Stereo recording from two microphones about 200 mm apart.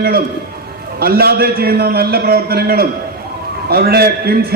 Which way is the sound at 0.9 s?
50° right (ahead or behind).